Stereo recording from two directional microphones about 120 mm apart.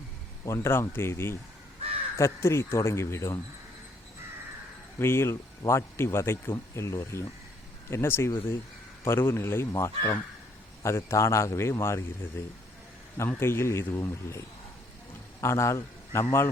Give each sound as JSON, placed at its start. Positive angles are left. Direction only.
{"t": 0.4, "sound": "speech", "side_deg": 20}
{"t": 4.9, "sound": "a man's voice", "side_deg": 20}